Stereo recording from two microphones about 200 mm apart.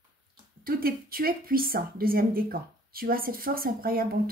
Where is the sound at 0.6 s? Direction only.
45° right (ahead or behind).